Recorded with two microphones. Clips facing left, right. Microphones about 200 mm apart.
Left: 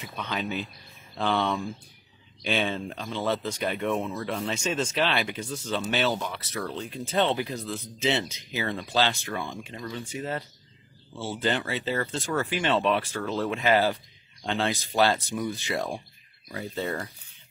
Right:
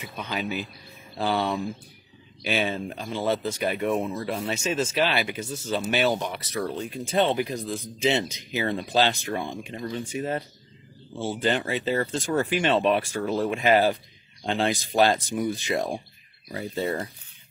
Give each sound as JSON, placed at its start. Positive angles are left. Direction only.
{"t": 0.0, "sound": "speech", "side_deg": -10}
{"t": 11.1, "sound": "speech", "side_deg": -15}